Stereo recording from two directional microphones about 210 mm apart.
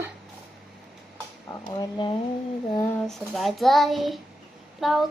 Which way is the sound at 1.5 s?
20° left (ahead or behind).